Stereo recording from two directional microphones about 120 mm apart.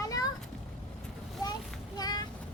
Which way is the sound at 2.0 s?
30° left (ahead or behind).